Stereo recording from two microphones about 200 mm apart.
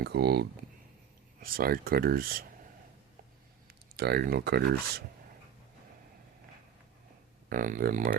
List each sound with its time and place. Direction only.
0.0 s speech: 55° right (ahead or behind)
3.7 s speech: 50° right (ahead or behind)
7.5 s speech: 45° right (ahead or behind)